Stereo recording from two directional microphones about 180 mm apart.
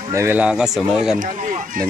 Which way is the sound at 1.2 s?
45° right (ahead or behind).